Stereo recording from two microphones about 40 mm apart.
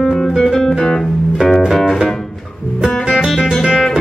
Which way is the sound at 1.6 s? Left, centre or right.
Centre.